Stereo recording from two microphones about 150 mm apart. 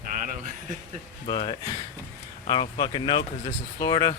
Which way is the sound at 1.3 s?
40° left (ahead or behind).